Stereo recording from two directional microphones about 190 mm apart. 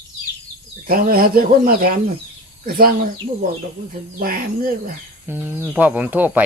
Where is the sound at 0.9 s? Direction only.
50° right (ahead or behind).